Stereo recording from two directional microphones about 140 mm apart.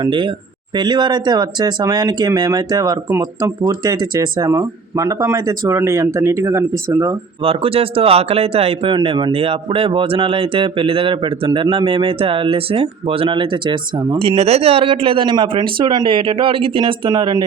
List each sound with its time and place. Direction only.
0.0 s speech: 35° right (ahead or behind)
7.4 s a man's voice: 40° right (ahead or behind)